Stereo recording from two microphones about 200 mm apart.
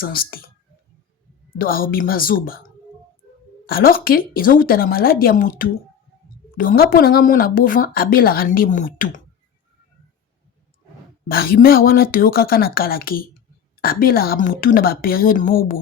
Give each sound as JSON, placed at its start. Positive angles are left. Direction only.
{"t": 0.0, "sound": "speech", "side_deg": 50}
{"t": 1.5, "sound": "speech", "side_deg": 45}
{"t": 11.3, "sound": "speech", "side_deg": 50}